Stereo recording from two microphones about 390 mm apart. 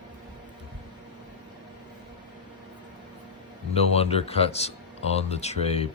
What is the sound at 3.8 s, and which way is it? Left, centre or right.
Speech, centre.